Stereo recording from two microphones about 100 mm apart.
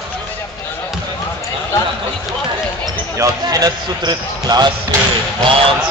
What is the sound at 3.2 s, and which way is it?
Speech, 40° right (ahead or behind).